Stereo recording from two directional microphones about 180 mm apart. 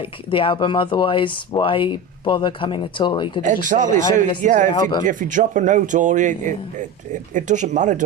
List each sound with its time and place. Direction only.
0.0 s speech: 30° left (ahead or behind)
3.4 s a man's voice: 45° right (ahead or behind)
4.7 s speech: 25° left (ahead or behind)
5.0 s a man's voice: 45° right (ahead or behind)